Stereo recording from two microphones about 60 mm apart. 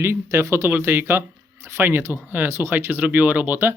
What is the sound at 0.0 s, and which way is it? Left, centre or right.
Speech, right.